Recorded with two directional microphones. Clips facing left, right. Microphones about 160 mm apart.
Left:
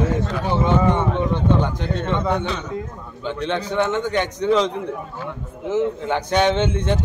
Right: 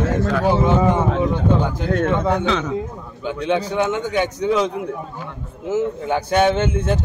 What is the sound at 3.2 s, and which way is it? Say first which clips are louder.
A man's voice: right 3 dB; 10° right (ahead or behind).